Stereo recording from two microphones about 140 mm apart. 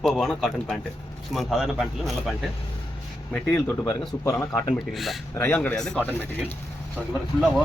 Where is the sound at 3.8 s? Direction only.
30° left (ahead or behind).